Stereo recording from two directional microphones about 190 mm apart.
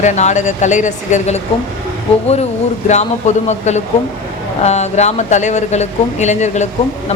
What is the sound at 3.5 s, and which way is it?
A woman's voice, 35° left (ahead or behind).